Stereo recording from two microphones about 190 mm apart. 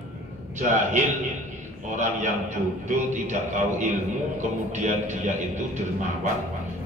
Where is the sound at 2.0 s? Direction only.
40° right (ahead or behind).